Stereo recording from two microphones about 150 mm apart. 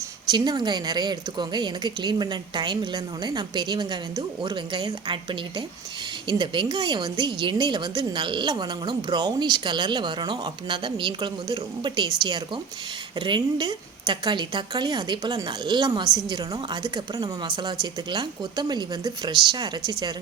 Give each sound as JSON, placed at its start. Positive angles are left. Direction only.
{"t": 0.3, "sound": "a woman's voice", "side_deg": -30}
{"t": 13.1, "sound": "a woman's voice", "side_deg": -30}